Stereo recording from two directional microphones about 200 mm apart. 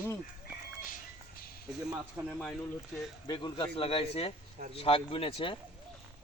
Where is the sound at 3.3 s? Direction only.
20° left (ahead or behind).